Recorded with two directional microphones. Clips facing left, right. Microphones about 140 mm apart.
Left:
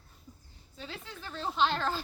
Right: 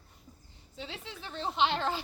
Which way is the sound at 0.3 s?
20° right (ahead or behind).